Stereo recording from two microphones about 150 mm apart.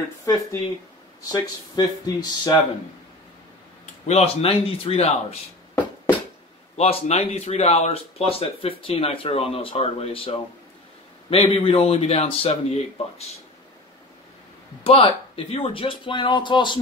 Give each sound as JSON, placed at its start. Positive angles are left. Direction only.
{"t": 0.2, "sound": "speech", "side_deg": 20}
{"t": 4.1, "sound": "speech", "side_deg": 40}
{"t": 6.8, "sound": "speech", "side_deg": 45}
{"t": 14.8, "sound": "speech", "side_deg": 40}